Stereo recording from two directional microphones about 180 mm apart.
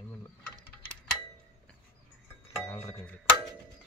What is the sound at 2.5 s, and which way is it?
Speech, 15° left (ahead or behind).